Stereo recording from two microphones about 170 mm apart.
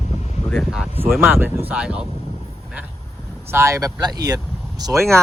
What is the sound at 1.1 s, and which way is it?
Speech, 10° right (ahead or behind).